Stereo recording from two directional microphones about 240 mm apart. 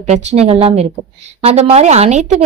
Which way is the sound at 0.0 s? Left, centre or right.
Right.